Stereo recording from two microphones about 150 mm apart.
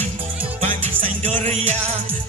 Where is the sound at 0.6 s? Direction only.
45° right (ahead or behind).